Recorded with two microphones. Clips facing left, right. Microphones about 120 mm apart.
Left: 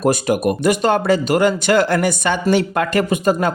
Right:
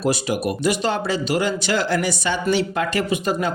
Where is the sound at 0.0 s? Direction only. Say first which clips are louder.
Left 5 dB; 50° left (ahead or behind).